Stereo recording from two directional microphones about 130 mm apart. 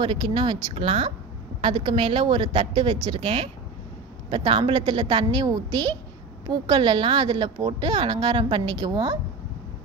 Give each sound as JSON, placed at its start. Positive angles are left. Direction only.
{"t": 0.0, "sound": "a woman's voice", "side_deg": -40}